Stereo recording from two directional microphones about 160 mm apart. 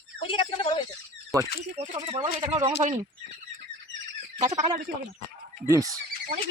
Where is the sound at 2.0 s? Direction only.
35° right (ahead or behind).